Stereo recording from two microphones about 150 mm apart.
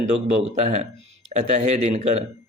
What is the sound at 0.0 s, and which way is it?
A man's voice, 50° right (ahead or behind).